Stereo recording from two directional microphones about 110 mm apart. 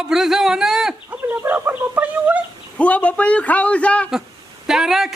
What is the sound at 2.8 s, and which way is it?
A man's voice, 10° left (ahead or behind).